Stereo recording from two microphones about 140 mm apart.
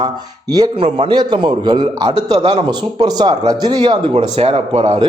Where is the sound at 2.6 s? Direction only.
30° right (ahead or behind).